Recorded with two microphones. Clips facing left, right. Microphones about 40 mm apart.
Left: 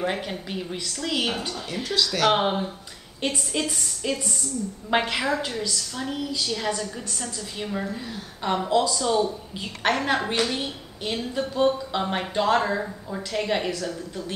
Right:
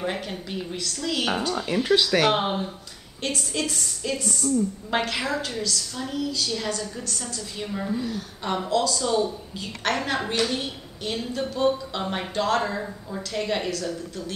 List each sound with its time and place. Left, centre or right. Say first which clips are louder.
0.0 s a woman's voice: left 2 dB; centre
1.5 s speech: right 7 dB; right
2.3 s a woman's voice: left 2 dB; centre